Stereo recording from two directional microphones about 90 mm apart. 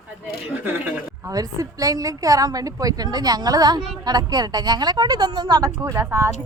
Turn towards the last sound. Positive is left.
turn(degrees=-35)  # may be behind; listen again after turning